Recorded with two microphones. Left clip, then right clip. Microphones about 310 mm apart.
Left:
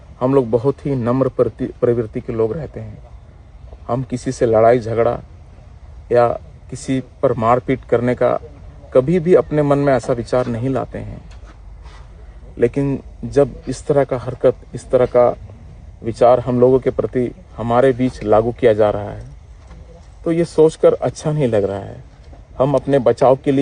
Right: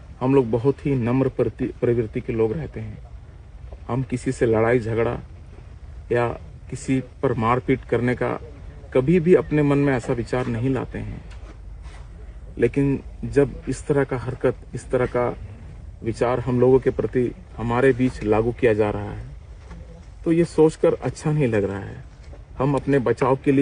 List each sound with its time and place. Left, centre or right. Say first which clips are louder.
0.3 s a man's voice: left 4 dB; left
4.4 s a man's voice: left 7 dB; left
12.5 s a man's voice: left 4 dB; left
20.3 s speech: left 4 dB; left